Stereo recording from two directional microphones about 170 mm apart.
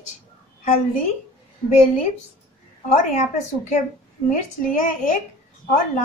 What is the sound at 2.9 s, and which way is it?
Speech, 50° left (ahead or behind).